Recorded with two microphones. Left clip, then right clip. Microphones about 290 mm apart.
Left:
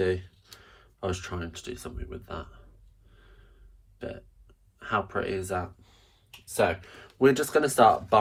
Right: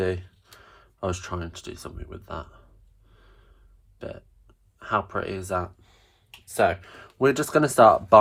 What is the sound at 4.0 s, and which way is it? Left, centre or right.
Burping, centre.